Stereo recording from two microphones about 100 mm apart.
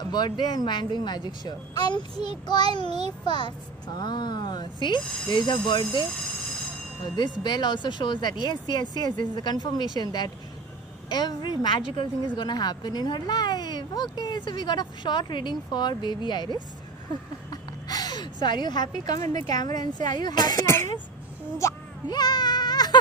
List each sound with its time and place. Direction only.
0.1 s a woman's voice: 45° left (ahead or behind)
7.2 s a woman's voice: 45° left (ahead or behind)
17.5 s a woman's voice: 40° left (ahead or behind)
20.5 s speech: 25° left (ahead or behind)
22.0 s baby cry: 45° left (ahead or behind)